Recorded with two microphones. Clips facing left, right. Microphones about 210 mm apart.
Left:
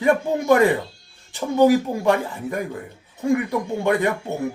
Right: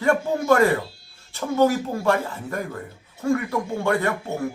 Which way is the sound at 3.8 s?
15° left (ahead or behind).